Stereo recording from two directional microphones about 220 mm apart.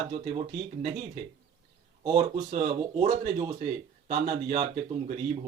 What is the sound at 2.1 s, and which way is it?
Speech, 30° right (ahead or behind).